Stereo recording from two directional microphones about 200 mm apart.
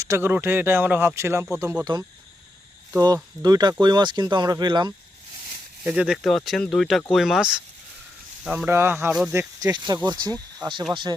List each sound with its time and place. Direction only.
0.0 s speech: 15° right (ahead or behind)
3.4 s speech: 20° right (ahead or behind)
5.8 s speech: 5° right (ahead or behind); by 10.8 s 20° right (ahead or behind)